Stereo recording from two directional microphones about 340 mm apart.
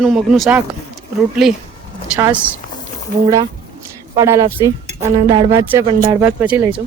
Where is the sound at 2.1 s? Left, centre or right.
Centre.